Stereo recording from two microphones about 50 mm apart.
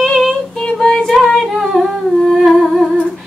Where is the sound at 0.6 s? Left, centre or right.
Centre.